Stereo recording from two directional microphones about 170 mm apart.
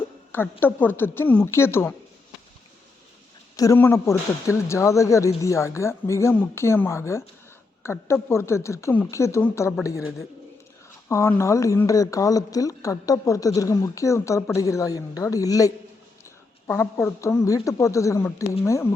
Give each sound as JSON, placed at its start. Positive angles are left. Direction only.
{"t": 0.6, "sound": "speech", "side_deg": 10}
{"t": 3.5, "sound": "speech", "side_deg": 20}
{"t": 11.1, "sound": "speech", "side_deg": 15}
{"t": 16.6, "sound": "speech", "side_deg": 10}